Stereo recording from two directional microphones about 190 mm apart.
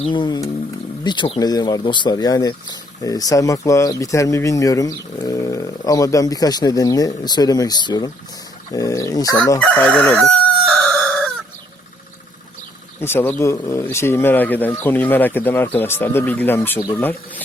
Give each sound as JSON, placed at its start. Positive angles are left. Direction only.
{"t": 0.0, "sound": "speech", "side_deg": 25}
{"t": 9.6, "sound": "chicken", "side_deg": 10}
{"t": 13.0, "sound": "speech", "side_deg": 10}